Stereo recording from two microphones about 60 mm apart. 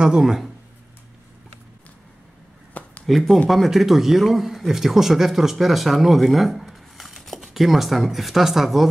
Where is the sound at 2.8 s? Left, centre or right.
Left.